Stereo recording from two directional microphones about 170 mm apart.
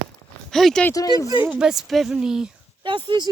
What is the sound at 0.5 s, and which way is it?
Speech, 5° left (ahead or behind).